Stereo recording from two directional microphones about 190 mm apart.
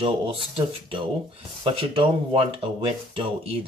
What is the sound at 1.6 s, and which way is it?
Speech, 25° right (ahead or behind).